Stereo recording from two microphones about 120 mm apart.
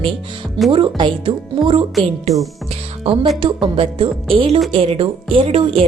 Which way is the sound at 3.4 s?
50° right (ahead or behind).